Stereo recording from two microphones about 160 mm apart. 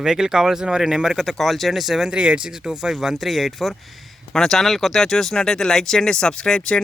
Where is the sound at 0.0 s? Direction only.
5° right (ahead or behind).